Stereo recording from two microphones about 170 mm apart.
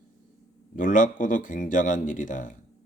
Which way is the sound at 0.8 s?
50° left (ahead or behind).